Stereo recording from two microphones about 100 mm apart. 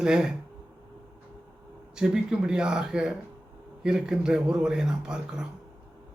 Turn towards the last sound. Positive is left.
turn(degrees=-5)  # may be behind; listen again after turning